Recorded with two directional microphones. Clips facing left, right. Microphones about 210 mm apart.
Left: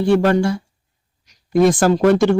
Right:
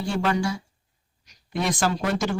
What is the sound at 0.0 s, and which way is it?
Speech, 55° left (ahead or behind).